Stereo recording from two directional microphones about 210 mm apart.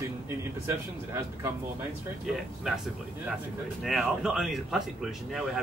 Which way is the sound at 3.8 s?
Centre (ahead or behind).